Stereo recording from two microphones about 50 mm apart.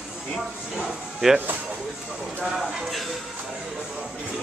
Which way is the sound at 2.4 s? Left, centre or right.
Centre.